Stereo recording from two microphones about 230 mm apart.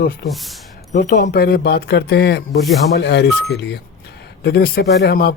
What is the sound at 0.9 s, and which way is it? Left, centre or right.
Speech, left.